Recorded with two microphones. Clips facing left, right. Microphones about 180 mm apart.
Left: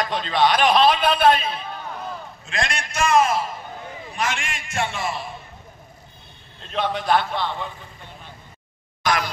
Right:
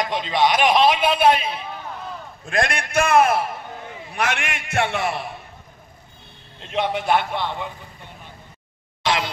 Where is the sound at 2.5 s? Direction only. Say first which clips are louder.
Right 5 dB; 55° right (ahead or behind).